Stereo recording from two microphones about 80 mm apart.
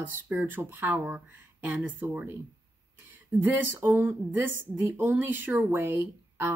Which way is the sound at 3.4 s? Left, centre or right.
Right.